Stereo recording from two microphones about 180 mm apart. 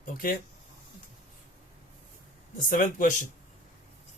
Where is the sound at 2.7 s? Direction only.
45° left (ahead or behind).